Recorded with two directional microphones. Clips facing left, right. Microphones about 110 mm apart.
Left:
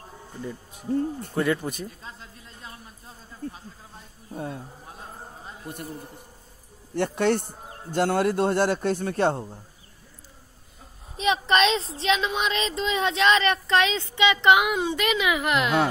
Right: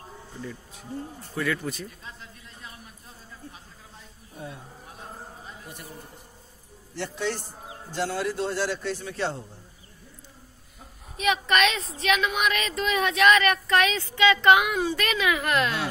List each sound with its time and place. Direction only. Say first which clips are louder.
0.4 s speech: left 3 dB; 15° left (ahead or behind)
0.9 s a man's voice: left 9 dB; 55° left (ahead or behind)
1.4 s speech: left 3 dB; 25° left (ahead or behind)
1.9 s a sound: left 2 dB; 35° left (ahead or behind)
3.4 s a man's voice: left 13 dB; 55° left (ahead or behind)
5.7 s speech: left 10 dB; 50° left (ahead or behind)
7.0 s a man's voice: left 7 dB; 55° left (ahead or behind)
11.1 s speech: left 2 dB; 30° left (ahead or behind)